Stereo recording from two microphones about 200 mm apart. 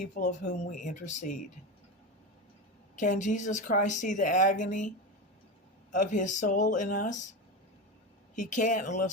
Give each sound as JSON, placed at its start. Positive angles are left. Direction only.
{"t": 0.0, "sound": "speech", "side_deg": 35}
{"t": 3.0, "sound": "speech", "side_deg": 40}
{"t": 5.9, "sound": "speech", "side_deg": 40}
{"t": 8.4, "sound": "speech", "side_deg": 40}